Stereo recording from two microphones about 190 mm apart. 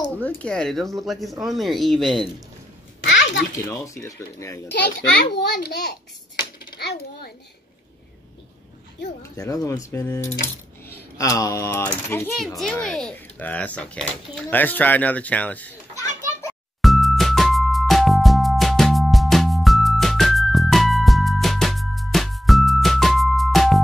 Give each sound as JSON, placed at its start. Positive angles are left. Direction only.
{"t": 0.2, "sound": "speech", "side_deg": 10}
{"t": 3.0, "sound": "a sound", "side_deg": 70}
{"t": 3.5, "sound": "speech", "side_deg": 15}
{"t": 5.3, "sound": "a child's voice", "side_deg": 60}
{"t": 9.2, "sound": "speech", "side_deg": 15}
{"t": 16.8, "sound": "music", "side_deg": 0}